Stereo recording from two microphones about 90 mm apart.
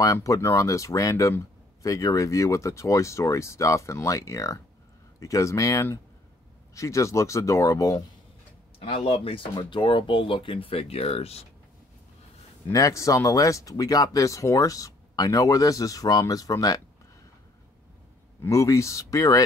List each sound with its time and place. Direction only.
0.0 s speech: 40° left (ahead or behind)
8.7 s speech: 90° left
9.6 s speech: 60° left (ahead or behind); by 11.2 s 90° left
12.7 s speech: 40° left (ahead or behind)
18.4 s speech: 35° left (ahead or behind)